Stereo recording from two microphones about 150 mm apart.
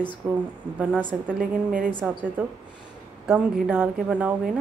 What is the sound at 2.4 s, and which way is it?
Speech, 10° right (ahead or behind).